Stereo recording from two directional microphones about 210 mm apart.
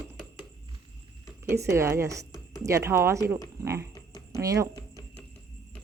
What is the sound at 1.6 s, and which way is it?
Speech, 15° right (ahead or behind).